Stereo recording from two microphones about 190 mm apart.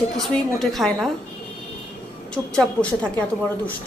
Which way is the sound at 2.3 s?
5° left (ahead or behind).